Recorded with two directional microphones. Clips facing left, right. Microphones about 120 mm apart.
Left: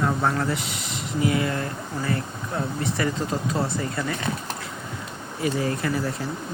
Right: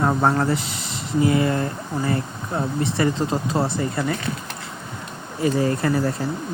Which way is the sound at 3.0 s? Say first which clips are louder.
Right 5 dB; 25° right (ahead or behind).